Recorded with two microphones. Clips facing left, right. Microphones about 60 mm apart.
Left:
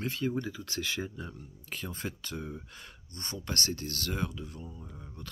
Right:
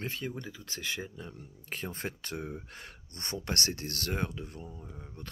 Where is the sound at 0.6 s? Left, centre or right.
Right.